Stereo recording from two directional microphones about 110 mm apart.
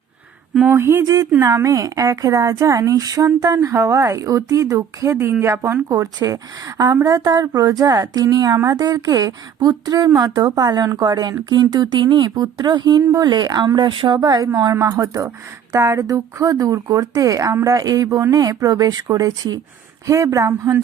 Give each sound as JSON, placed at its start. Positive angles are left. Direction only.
{"t": 0.7, "sound": "speech", "side_deg": -25}